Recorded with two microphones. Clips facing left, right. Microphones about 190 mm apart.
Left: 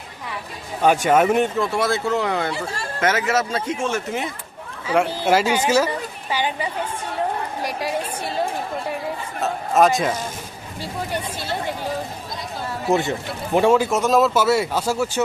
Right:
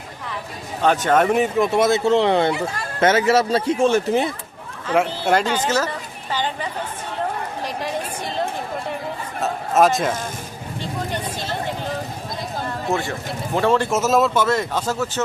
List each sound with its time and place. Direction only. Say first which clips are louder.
0.8 s speech: left 1 dB; 10° left (ahead or behind)
1.5 s speech: right 4 dB; 20° right (ahead or behind)
4.9 s speech: even; 10° left (ahead or behind)
7.6 s a sound: left 1 dB; 10° left (ahead or behind)
9.4 s speech: even; centre (ahead or behind)
12.9 s speech: left 5 dB; 20° left (ahead or behind)